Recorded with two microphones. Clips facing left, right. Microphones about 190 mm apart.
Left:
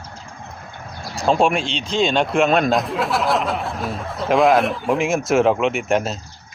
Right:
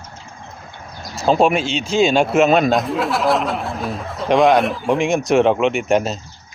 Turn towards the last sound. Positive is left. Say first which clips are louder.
# right 3 dB
turn(degrees=0)  # may be behind; listen again after turning